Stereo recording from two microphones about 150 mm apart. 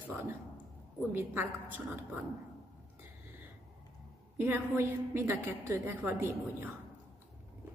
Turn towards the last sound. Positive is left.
turn(degrees=-15)  # may be behind; listen again after turning